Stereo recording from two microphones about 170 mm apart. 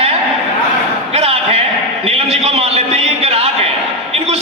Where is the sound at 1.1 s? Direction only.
35° right (ahead or behind).